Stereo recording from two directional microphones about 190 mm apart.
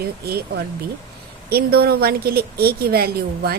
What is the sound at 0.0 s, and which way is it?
A woman's voice, 55° right (ahead or behind).